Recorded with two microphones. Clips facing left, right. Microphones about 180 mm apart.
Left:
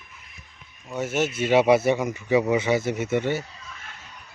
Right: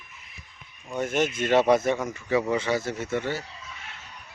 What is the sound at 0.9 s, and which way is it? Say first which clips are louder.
Speech: even; 5° left (ahead or behind).